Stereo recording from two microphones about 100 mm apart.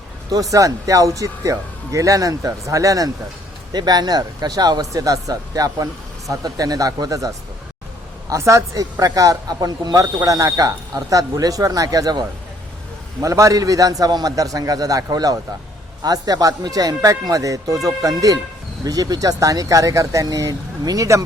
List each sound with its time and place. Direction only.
0.5 s speech: 35° right (ahead or behind)
13.2 s speech: 35° right (ahead or behind)